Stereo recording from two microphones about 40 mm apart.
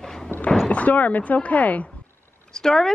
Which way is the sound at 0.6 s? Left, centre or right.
Left.